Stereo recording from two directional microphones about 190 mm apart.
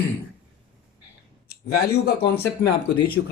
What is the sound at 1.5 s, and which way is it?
Speech, 55° left (ahead or behind).